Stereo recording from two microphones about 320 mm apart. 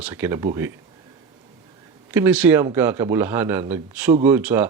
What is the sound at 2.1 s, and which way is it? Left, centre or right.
A man's voice, centre.